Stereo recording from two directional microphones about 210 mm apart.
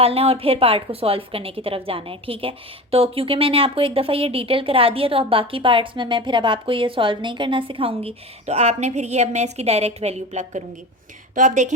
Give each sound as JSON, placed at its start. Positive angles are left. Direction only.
{"t": 0.0, "sound": "a woman's voice", "side_deg": -30}